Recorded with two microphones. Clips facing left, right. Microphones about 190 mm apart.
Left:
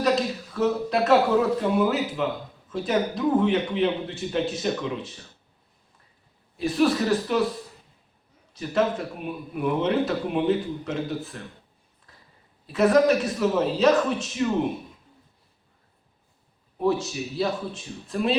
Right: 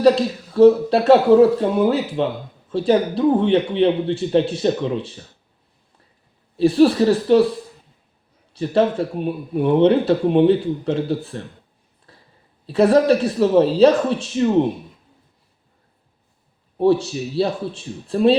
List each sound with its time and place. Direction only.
0.0 s speech: 30° right (ahead or behind)
6.6 s speech: 30° right (ahead or behind)
8.5 s speech: 30° right (ahead or behind)
12.1 s a sound: 30° right (ahead or behind)
12.6 s speech: 30° right (ahead or behind)
16.7 s speech: 30° right (ahead or behind)